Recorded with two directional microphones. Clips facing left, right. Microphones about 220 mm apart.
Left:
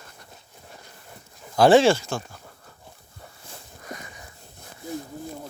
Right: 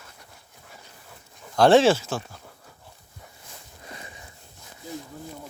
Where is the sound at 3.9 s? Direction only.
30° right (ahead or behind).